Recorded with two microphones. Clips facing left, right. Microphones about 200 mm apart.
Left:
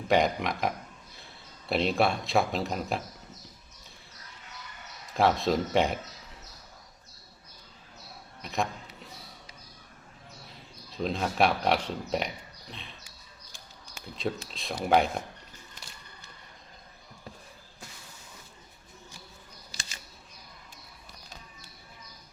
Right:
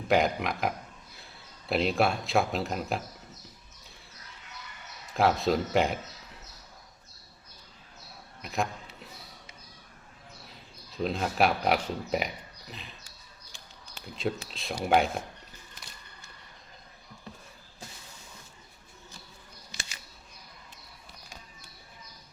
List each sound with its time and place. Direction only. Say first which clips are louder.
0.1 s speech: even; centre (ahead or behind)
5.1 s speech: even; centre (ahead or behind)
8.4 s a man's voice: even; centre (ahead or behind)
10.9 s speech: even; centre (ahead or behind)
14.2 s speech: right 1 dB; centre (ahead or behind)
19.7 s camera: right 2 dB; 35° left (ahead or behind)